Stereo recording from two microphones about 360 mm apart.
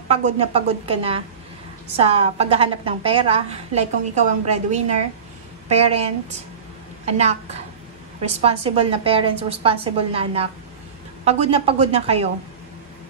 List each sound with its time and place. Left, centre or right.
0.1 s a woman's voice: centre
8.2 s a woman's voice: centre